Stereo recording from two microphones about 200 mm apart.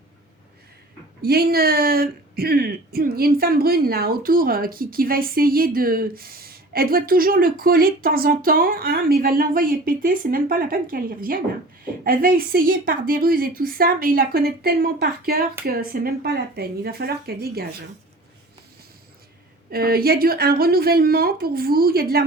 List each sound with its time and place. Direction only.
1.2 s speech: 50° right (ahead or behind)
19.7 s speech: 50° right (ahead or behind)